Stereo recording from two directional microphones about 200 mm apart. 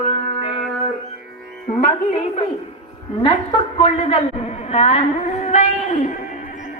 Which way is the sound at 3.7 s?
30° left (ahead or behind).